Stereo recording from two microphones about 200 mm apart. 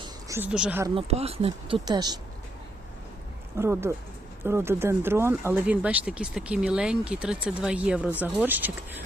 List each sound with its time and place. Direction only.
0.0 s a sound: 15° right (ahead or behind)
0.9 s speech: 30° right (ahead or behind)
3.6 s speech: 15° right (ahead or behind)